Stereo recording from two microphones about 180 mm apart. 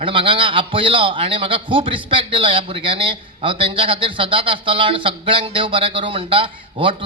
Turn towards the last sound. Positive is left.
turn(degrees=-30)  # may be behind; listen again after turning